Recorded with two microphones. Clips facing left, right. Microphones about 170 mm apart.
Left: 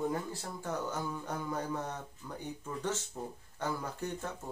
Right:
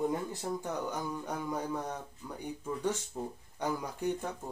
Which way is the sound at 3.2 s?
10° right (ahead or behind).